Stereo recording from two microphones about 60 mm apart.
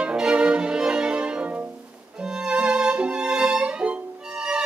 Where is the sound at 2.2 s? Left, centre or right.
Centre.